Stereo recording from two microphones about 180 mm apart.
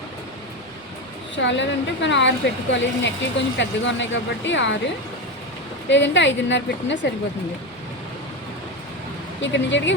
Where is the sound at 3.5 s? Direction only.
85° left.